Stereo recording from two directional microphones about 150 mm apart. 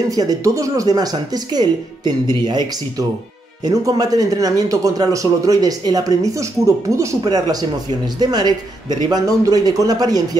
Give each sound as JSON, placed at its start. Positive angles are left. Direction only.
{"t": 0.1, "sound": "speech", "side_deg": -25}